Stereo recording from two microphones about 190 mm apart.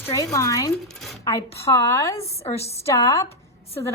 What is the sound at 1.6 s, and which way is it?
Speech, 15° left (ahead or behind).